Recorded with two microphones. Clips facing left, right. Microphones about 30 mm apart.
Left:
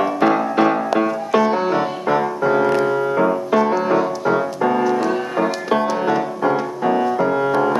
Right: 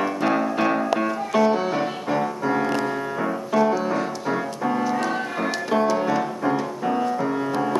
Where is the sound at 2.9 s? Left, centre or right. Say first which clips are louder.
Left 8 dB; centre.